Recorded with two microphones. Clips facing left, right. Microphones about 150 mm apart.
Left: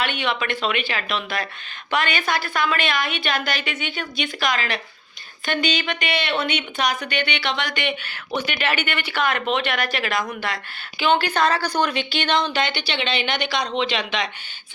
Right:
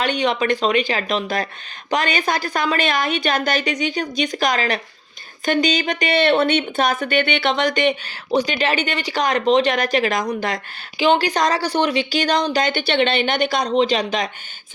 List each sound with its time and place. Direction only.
0.0 s speech: 40° right (ahead or behind)